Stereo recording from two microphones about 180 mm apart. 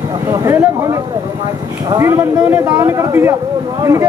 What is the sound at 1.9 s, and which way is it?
Speech, 15° right (ahead or behind).